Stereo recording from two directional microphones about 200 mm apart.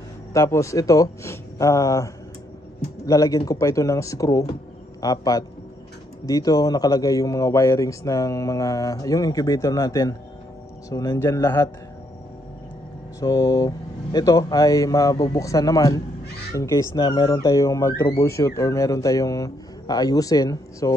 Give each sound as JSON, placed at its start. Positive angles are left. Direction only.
{"t": 0.3, "sound": "speech", "side_deg": 15}
{"t": 3.1, "sound": "speech", "side_deg": 15}
{"t": 13.2, "sound": "speech", "side_deg": 15}